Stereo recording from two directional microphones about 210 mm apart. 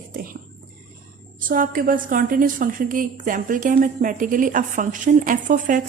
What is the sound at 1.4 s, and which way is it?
A woman's voice, 40° right (ahead or behind).